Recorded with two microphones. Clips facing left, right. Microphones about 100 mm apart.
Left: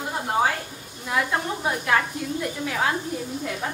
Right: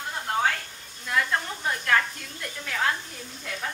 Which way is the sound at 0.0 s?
15° left (ahead or behind).